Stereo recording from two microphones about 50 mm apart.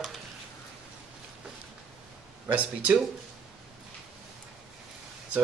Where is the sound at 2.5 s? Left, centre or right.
Right.